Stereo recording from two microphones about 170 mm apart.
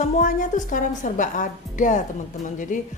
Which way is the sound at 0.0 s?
50° left (ahead or behind).